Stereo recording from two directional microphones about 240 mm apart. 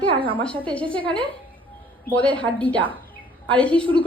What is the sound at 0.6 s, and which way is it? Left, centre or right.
Speech, centre.